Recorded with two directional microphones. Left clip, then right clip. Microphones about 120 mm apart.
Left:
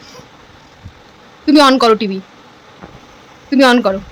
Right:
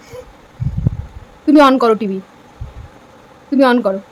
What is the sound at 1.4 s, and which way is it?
Speech, 5° right (ahead or behind).